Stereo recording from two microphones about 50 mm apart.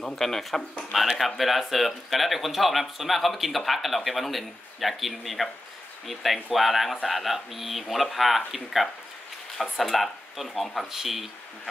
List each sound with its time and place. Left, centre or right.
0.0 s speech: centre